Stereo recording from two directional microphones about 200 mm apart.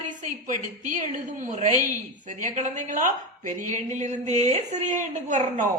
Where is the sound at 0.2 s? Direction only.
40° right (ahead or behind).